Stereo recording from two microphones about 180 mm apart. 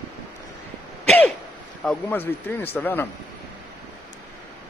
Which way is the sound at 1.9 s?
10° left (ahead or behind).